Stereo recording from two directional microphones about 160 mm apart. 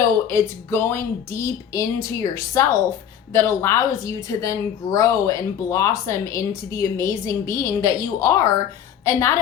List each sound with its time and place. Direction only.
0.3 s a woman's voice: 15° left (ahead or behind)